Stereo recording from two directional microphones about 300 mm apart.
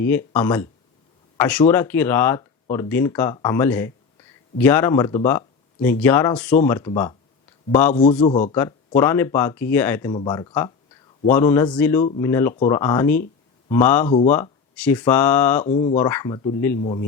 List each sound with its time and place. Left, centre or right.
0.0 s speech: centre
8.3 s speech: left
9.0 s speech: centre
12.0 s speech: centre
12.3 s speech: centre
15.6 s speech: left
16.0 s speech: centre